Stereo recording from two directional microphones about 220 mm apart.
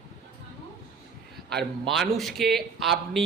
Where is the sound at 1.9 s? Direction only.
Centre (ahead or behind).